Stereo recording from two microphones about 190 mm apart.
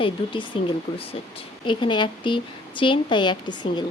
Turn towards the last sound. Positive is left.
turn(degrees=25)  # may be behind; listen again after turning